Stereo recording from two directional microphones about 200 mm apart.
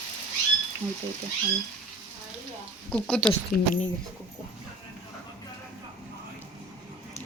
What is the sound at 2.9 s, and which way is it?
Speech, 5° left (ahead or behind).